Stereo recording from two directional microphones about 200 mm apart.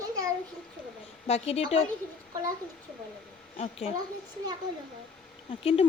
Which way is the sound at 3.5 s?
30° left (ahead or behind).